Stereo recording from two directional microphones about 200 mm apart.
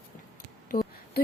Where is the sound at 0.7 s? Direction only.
45° left (ahead or behind).